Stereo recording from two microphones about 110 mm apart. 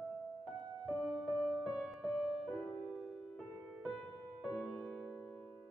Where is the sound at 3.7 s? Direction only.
5° right (ahead or behind).